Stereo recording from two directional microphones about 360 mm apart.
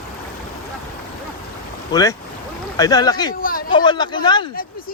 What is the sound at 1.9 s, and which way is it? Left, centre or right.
Speech, centre.